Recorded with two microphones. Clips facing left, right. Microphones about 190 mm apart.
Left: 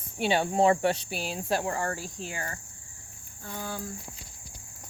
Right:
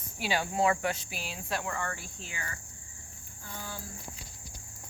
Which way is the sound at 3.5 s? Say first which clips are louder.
Left 6 dB; 55° left (ahead or behind).